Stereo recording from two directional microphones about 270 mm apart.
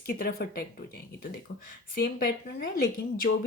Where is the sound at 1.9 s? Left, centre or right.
Left.